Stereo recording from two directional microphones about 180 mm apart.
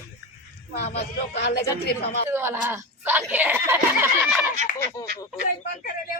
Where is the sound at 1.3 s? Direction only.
60° left (ahead or behind).